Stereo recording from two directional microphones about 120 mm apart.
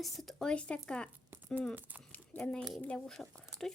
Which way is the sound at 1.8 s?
15° right (ahead or behind).